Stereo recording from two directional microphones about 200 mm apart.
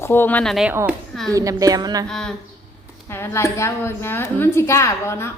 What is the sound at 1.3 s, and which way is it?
Speech, 15° right (ahead or behind).